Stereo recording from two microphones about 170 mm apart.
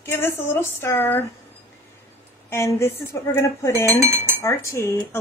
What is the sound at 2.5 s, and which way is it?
A woman's voice, 15° left (ahead or behind).